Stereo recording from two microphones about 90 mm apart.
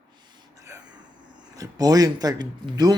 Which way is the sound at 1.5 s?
40° right (ahead or behind).